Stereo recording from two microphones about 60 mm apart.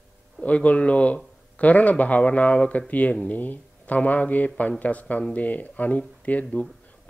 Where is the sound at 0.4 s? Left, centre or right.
Left.